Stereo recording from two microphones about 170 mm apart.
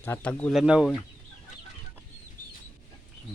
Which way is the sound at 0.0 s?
10° left (ahead or behind).